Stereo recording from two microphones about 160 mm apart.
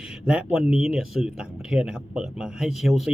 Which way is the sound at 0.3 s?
5° right (ahead or behind).